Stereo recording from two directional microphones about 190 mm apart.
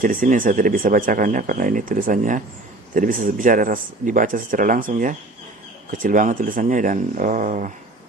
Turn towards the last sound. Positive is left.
turn(degrees=-45)  # may be behind; listen again after turning